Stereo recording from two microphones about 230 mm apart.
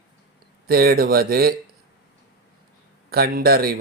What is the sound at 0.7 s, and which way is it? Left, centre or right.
Speech, right.